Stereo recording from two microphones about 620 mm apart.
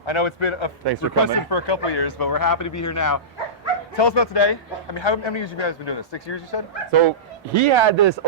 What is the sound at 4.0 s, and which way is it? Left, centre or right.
Speech, left.